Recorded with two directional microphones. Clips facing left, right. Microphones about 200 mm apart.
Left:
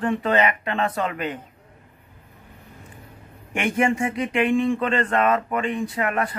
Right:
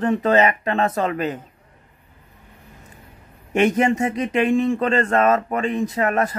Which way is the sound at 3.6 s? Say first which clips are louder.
Right 4 dB; 40° right (ahead or behind).